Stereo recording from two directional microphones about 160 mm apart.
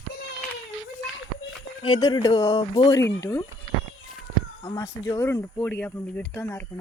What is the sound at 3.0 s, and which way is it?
Speech, 20° left (ahead or behind).